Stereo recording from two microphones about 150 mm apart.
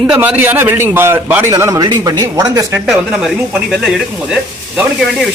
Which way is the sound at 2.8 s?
5° right (ahead or behind).